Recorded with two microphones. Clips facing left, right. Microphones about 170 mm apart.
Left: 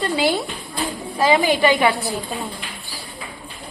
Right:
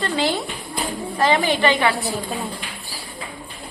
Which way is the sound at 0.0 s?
15° left (ahead or behind).